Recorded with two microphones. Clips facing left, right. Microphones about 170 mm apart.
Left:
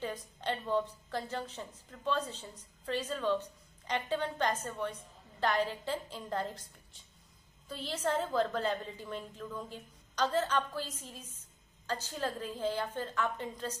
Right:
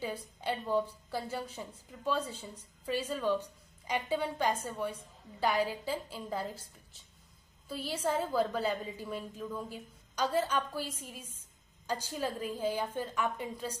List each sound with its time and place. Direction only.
0.4 s a woman's voice: 10° right (ahead or behind)